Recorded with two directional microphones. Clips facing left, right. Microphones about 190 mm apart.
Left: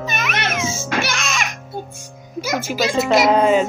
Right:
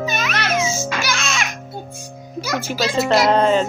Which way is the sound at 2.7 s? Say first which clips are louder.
Even; 15° left (ahead or behind).